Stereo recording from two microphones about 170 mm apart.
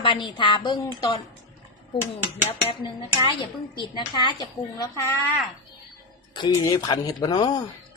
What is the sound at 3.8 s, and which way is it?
Speech, 25° left (ahead or behind).